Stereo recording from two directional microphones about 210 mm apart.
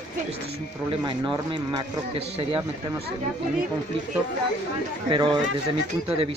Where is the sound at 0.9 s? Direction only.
25° right (ahead or behind).